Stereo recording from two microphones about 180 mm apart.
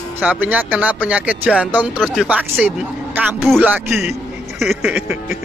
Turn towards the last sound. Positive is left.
turn(degrees=-5)  # may be behind; listen again after turning